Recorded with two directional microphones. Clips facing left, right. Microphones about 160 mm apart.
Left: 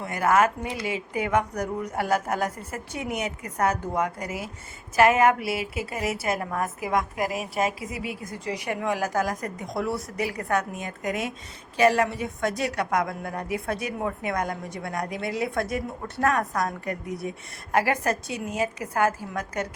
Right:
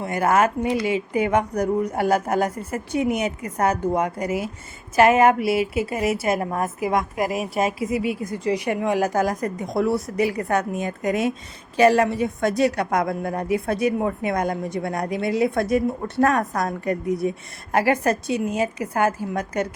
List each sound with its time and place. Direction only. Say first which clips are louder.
0.0 s a woman's voice: right 2 dB; 25° right (ahead or behind)